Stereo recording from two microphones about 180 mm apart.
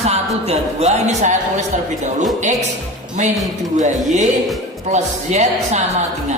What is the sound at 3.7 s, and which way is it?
A woman's voice, 40° right (ahead or behind).